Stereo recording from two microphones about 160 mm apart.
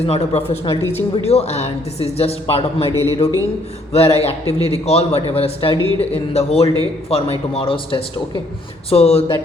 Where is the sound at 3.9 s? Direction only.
40° left (ahead or behind).